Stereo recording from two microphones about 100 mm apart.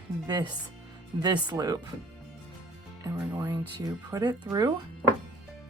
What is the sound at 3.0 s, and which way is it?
Speech, 35° right (ahead or behind).